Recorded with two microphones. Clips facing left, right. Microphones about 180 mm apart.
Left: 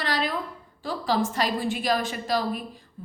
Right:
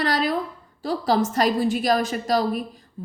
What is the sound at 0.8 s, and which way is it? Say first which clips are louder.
A woman's voice: right 4 dB; 45° right (ahead or behind).